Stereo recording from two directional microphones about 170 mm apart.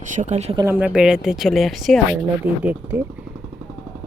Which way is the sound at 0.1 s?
45° right (ahead or behind).